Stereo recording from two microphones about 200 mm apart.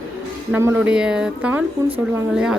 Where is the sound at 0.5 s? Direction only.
10° right (ahead or behind).